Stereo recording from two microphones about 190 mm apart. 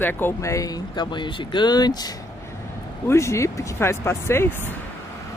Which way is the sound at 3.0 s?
15° left (ahead or behind).